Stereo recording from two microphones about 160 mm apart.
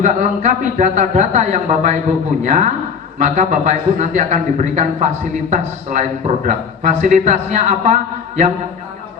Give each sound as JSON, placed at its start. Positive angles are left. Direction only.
{"t": 0.0, "sound": "a man's voice", "side_deg": -50}